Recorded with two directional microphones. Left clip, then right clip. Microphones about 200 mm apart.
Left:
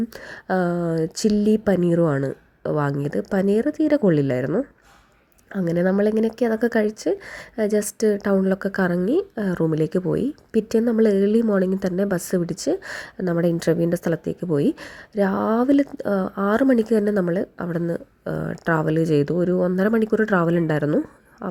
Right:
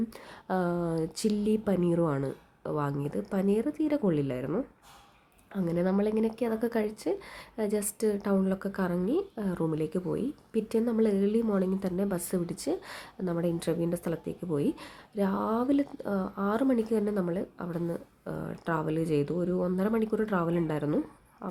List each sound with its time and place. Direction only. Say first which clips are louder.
0.4 s speech: left 8 dB; 25° left (ahead or behind)